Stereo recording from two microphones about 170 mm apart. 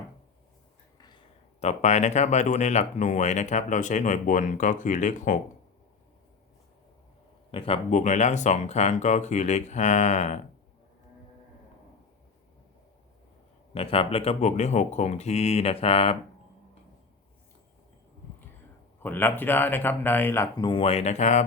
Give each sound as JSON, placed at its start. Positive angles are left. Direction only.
{"t": 0.9, "sound": "a sound", "side_deg": 25}
{"t": 1.6, "sound": "speech", "side_deg": 40}
{"t": 7.5, "sound": "speech", "side_deg": 30}
{"t": 7.9, "sound": "speech", "side_deg": 45}
{"t": 13.7, "sound": "speech", "side_deg": 35}
{"t": 19.0, "sound": "speech", "side_deg": 10}
{"t": 20.6, "sound": "speech", "side_deg": 30}